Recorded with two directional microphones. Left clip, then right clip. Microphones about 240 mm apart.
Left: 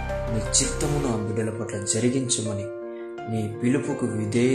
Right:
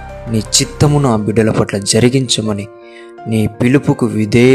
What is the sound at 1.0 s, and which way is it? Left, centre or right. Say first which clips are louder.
Speech: right 13 dB; right.